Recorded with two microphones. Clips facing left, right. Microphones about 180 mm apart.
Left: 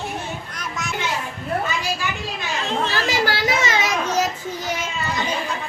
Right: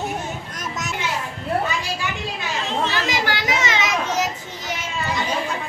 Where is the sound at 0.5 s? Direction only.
45° right (ahead or behind).